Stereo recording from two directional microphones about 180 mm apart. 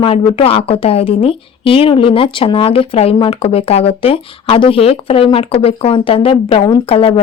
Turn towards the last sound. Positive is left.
turn(degrees=30)  # may be behind; listen again after turning